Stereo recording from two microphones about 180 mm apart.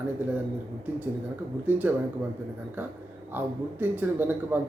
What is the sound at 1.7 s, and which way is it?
Speech, 10° right (ahead or behind).